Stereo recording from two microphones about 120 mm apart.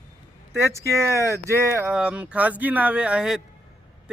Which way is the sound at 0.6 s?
25° right (ahead or behind).